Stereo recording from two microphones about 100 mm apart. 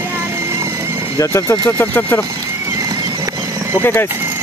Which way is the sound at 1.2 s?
30° left (ahead or behind).